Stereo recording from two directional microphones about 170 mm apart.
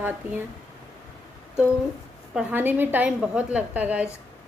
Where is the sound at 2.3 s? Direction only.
10° right (ahead or behind).